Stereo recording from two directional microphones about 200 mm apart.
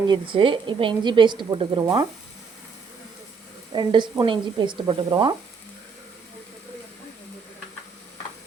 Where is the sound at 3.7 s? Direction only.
25° right (ahead or behind).